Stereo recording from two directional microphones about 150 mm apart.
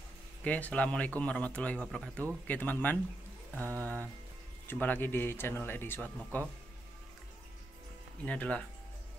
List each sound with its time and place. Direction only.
0.4 s speech: 10° left (ahead or behind)
8.3 s speech: 10° left (ahead or behind)